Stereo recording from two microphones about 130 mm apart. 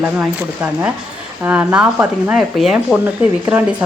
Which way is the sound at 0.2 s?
15° right (ahead or behind).